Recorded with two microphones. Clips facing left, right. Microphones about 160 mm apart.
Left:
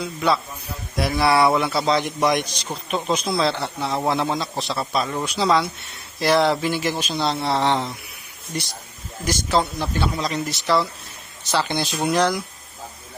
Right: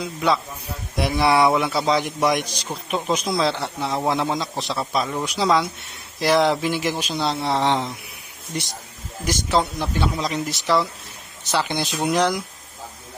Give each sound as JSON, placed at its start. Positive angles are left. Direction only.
{"t": 0.0, "sound": "a man's voice", "side_deg": -15}
{"t": 9.2, "sound": "a man's voice", "side_deg": -15}